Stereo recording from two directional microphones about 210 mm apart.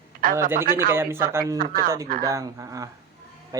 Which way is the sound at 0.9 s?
10° right (ahead or behind).